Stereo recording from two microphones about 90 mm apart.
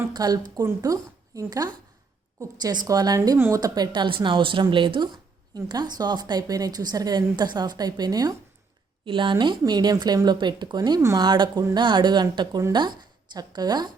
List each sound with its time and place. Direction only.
0.1 s a woman's voice: 50° right (ahead or behind)
3.3 s a woman's voice: 30° right (ahead or behind)
3.6 s a woman's voice: 55° right (ahead or behind)
9.0 s a woman's voice: 70° right (ahead or behind)
9.3 s a woman's voice: 55° right (ahead or behind)